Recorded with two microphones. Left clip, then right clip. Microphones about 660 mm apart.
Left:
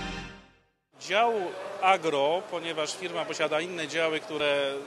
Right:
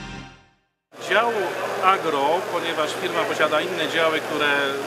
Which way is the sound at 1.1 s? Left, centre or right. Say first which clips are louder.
Right 5 dB; left.